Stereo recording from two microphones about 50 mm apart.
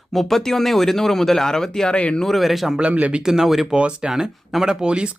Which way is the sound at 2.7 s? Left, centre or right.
Right.